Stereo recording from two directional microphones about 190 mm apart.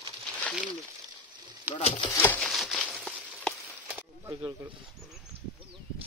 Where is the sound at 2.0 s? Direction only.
15° left (ahead or behind).